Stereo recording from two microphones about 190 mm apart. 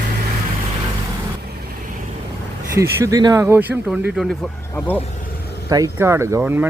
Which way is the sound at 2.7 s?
15° right (ahead or behind).